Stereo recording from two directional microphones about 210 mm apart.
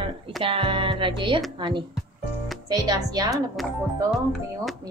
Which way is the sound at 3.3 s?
Centre (ahead or behind).